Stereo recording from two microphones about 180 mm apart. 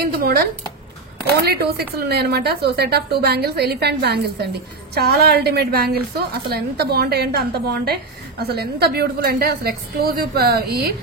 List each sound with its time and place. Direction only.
0.1 s a woman's voice: 55° right (ahead or behind)